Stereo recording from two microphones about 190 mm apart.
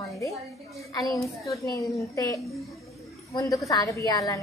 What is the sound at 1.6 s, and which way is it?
A woman's voice, 15° left (ahead or behind).